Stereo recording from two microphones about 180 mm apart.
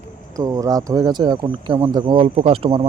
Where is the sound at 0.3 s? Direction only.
20° right (ahead or behind).